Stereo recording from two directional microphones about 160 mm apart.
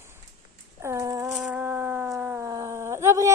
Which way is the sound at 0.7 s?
20° right (ahead or behind).